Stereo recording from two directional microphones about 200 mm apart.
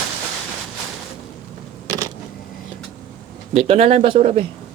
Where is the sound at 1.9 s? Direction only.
15° right (ahead or behind).